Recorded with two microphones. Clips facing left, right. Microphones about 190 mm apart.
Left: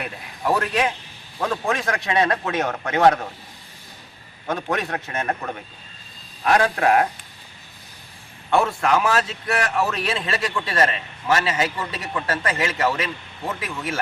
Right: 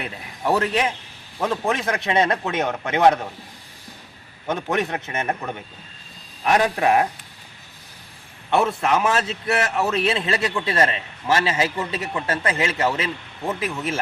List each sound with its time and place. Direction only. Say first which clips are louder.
0.0 s a man's voice: even; 25° right (ahead or behind)
4.4 s a man's voice: right 2 dB; 20° right (ahead or behind)
6.4 s a man's voice: even; 20° right (ahead or behind)
8.4 s a man's voice: even; 20° right (ahead or behind)